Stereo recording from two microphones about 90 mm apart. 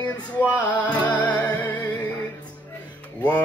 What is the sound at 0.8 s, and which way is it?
Music, 15° left (ahead or behind).